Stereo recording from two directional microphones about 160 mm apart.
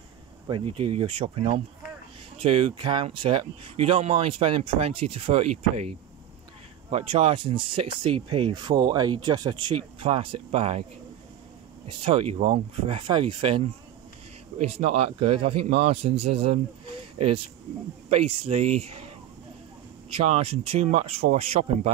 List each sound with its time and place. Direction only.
0.5 s speech: 35° right (ahead or behind)
6.9 s speech: 35° right (ahead or behind)
11.9 s speech: 35° right (ahead or behind)
14.7 s speech: 40° right (ahead or behind)
18.1 s speech: 40° right (ahead or behind)
20.2 s speech: 40° right (ahead or behind)